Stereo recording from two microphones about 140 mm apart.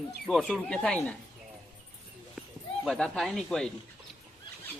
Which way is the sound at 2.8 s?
5° left (ahead or behind).